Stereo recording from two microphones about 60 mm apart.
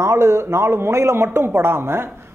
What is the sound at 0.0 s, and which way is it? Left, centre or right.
Speech, right.